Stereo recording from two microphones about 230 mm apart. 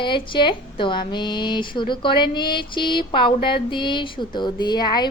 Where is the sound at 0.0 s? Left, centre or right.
Left.